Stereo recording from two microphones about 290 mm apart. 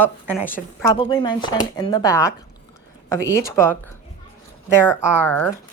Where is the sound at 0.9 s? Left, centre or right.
Centre.